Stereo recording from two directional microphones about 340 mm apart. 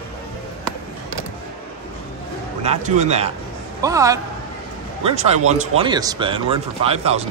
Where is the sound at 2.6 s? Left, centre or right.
Centre.